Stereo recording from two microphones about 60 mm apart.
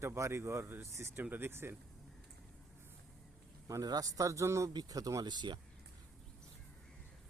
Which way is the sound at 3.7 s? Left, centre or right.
Right.